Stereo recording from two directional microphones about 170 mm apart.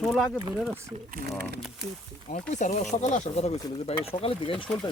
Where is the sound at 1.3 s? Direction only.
70° right (ahead or behind).